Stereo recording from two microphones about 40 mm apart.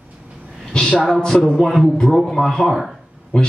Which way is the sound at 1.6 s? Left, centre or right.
Centre.